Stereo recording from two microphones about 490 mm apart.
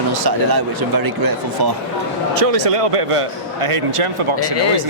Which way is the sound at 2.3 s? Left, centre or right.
Right.